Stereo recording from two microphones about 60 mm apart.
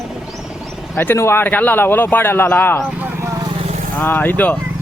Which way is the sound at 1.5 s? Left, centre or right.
Left.